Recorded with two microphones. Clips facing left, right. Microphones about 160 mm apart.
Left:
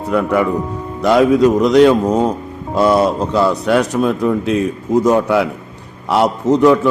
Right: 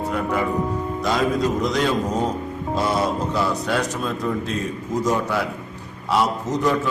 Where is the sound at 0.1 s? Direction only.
70° left (ahead or behind).